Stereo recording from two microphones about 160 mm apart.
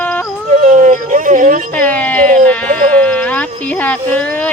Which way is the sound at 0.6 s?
55° right (ahead or behind).